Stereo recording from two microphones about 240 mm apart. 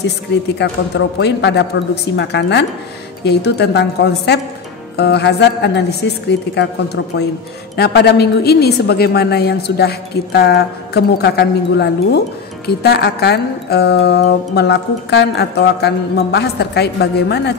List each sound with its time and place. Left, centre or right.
0.0 s music: left